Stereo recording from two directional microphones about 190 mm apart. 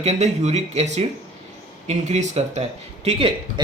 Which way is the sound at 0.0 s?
35° right (ahead or behind).